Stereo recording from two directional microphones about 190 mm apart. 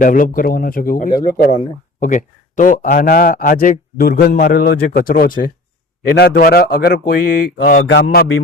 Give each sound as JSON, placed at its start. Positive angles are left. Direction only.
{"t": 0.0, "sound": "a man's voice", "side_deg": 45}
{"t": 7.6, "sound": "a man's voice", "side_deg": 70}